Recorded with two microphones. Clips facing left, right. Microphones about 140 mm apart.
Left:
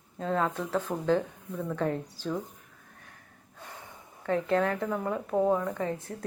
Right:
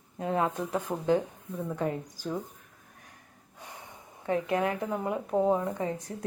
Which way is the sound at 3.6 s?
15° right (ahead or behind).